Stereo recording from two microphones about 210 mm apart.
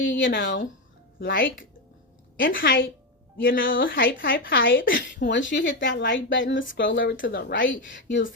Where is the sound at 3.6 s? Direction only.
65° left (ahead or behind).